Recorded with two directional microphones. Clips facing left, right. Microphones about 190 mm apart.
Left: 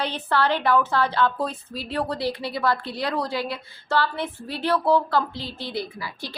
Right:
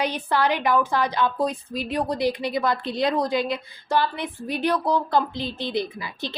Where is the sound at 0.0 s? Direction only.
15° right (ahead or behind).